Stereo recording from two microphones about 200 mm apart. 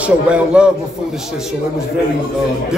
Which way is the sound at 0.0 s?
5° right (ahead or behind).